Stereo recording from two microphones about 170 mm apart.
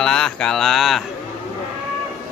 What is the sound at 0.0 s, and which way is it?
Mantra, 5° left (ahead or behind).